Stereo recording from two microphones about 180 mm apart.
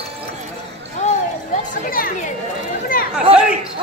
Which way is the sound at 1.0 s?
45° left (ahead or behind).